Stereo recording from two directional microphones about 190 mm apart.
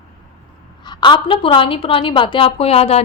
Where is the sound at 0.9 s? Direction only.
25° left (ahead or behind).